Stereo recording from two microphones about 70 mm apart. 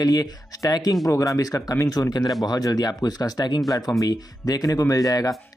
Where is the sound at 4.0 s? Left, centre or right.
Left.